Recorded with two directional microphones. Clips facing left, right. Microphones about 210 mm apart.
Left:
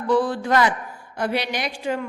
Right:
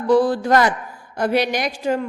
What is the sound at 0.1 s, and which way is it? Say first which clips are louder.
A woman's voice: right 5 dB; 40° right (ahead or behind).